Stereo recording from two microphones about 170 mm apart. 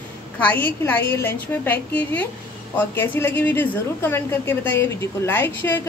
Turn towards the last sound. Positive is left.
turn(degrees=10)  # may be behind; listen again after turning